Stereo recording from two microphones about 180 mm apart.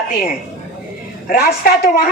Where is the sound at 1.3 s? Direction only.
55° left (ahead or behind).